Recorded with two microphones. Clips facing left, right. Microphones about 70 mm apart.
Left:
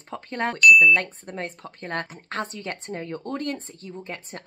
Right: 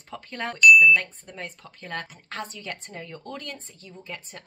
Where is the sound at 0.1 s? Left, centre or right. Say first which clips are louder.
Left 5 dB; left.